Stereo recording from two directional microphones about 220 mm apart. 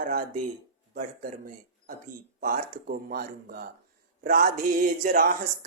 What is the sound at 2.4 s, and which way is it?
A woman's voice, 40° right (ahead or behind).